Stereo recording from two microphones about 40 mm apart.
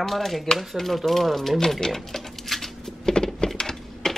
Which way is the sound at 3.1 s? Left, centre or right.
Centre.